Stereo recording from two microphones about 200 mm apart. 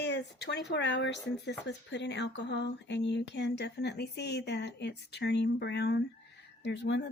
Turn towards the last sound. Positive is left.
turn(degrees=60)  # may be behind; listen again after turning